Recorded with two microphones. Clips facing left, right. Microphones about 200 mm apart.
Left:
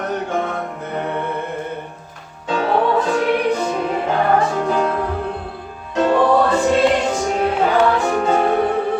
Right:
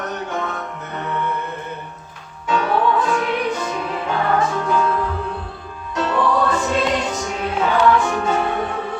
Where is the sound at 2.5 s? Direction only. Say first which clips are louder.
Left 1 dB; 35° left (ahead or behind).